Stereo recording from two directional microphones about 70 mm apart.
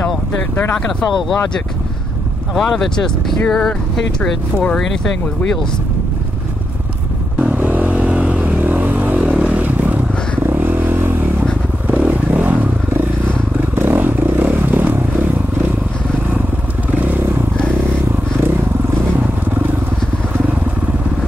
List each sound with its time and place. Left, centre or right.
0.8 s speech: centre
7.5 s vehicle: right
13.6 s motorcycle: right
16.9 s vehicle: right